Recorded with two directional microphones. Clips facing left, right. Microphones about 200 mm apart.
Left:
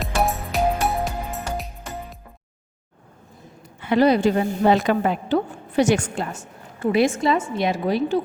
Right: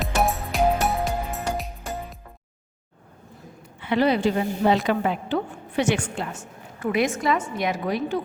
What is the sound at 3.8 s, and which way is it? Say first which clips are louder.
A woman's voice: left 4 dB; 40° left (ahead or behind).